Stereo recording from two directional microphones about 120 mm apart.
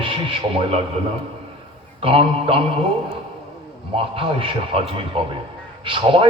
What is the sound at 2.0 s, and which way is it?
Speech, 50° right (ahead or behind).